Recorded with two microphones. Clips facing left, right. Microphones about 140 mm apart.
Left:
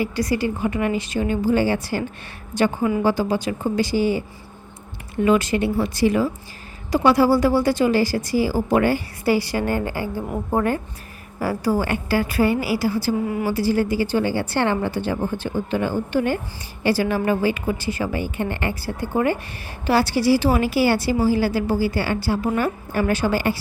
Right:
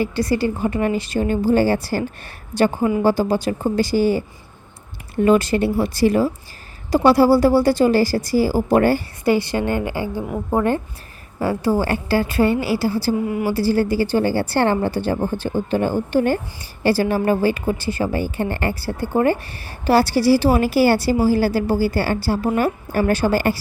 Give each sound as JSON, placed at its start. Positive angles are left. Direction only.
{"t": 0.0, "sound": "a woman's voice", "side_deg": -30}
{"t": 5.2, "sound": "a woman's voice", "side_deg": -35}
{"t": 9.2, "sound": "a woman's voice", "side_deg": -25}
{"t": 10.2, "sound": "a woman's voice", "side_deg": 0}
{"t": 11.3, "sound": "a woman's voice", "side_deg": -25}